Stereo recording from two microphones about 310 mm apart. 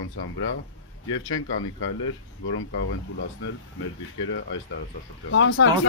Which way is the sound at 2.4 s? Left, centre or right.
Left.